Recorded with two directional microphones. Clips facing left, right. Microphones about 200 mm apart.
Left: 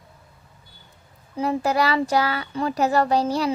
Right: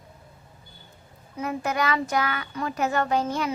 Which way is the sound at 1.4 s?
35° left (ahead or behind).